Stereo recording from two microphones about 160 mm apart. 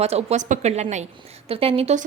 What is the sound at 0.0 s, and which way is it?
A woman's voice, 40° right (ahead or behind).